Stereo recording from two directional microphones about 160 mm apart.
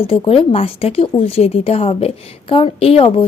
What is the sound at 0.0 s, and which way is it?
Speech, 35° left (ahead or behind).